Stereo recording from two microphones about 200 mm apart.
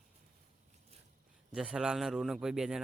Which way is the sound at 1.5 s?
5° right (ahead or behind).